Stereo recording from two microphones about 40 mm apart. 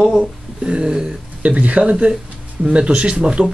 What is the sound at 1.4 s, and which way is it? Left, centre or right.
Speech, right.